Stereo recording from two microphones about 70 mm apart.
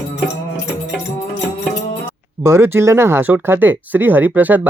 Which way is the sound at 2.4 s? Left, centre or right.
Right.